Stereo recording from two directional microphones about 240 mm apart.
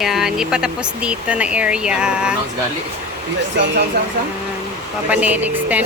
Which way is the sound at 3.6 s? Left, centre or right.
Right.